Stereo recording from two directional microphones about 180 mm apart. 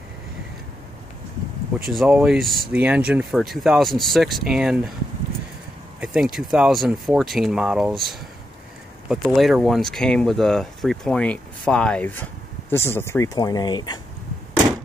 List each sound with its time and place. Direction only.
1.9 s speech: 5° right (ahead or behind)
5.9 s speech: 5° right (ahead or behind); by 13.9 s 25° left (ahead or behind)